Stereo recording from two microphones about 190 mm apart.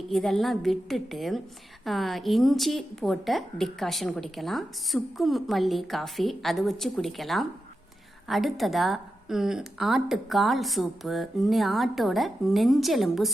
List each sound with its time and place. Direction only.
0.1 s a woman's voice: centre (ahead or behind)